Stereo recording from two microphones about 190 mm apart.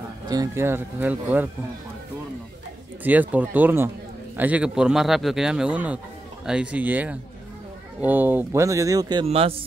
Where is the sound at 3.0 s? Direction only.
10° right (ahead or behind).